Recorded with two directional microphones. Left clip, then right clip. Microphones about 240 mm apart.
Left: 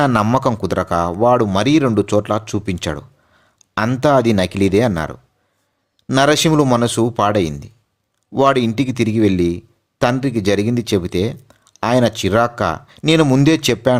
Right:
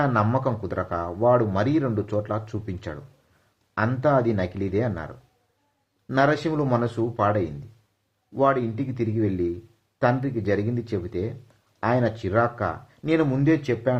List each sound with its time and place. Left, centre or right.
0.0 s speech: left